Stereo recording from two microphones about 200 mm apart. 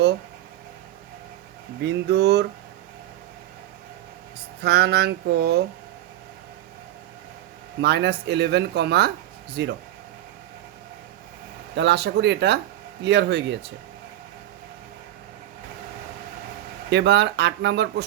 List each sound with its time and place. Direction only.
1.8 s speech: 55° right (ahead or behind)
4.6 s speech: 55° right (ahead or behind)
7.8 s speech: 60° right (ahead or behind)
11.8 s speech: 60° right (ahead or behind)
16.9 s speech: 60° right (ahead or behind)